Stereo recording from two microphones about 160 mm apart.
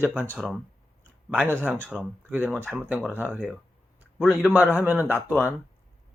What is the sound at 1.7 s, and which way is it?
Speech, centre (ahead or behind).